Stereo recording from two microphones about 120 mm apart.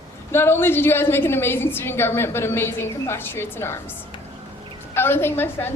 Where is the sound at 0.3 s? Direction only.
20° left (ahead or behind).